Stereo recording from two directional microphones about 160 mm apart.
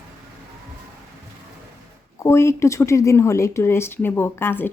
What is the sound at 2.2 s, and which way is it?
Speech, 20° left (ahead or behind).